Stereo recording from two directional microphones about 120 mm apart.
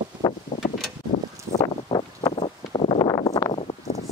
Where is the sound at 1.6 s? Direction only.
35° left (ahead or behind).